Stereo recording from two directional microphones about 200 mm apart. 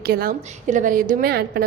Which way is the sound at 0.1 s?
45° right (ahead or behind).